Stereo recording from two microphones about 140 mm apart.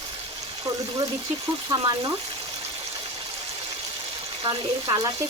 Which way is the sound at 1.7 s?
30° right (ahead or behind).